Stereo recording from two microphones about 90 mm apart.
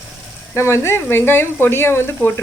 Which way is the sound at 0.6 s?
30° left (ahead or behind).